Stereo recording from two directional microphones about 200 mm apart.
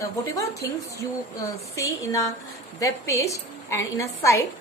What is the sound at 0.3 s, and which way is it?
A woman's voice, 15° left (ahead or behind).